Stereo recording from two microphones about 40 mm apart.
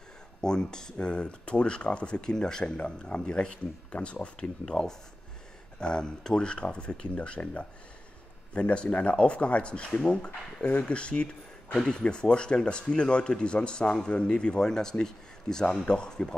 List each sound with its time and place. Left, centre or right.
0.4 s speech: centre
4.4 s speech: centre